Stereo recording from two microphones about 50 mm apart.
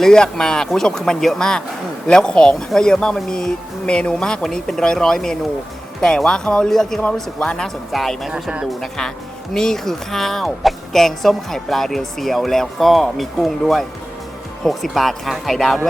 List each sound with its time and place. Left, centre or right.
0.0 s speech: centre
8.3 s speech: centre
9.6 s speech: centre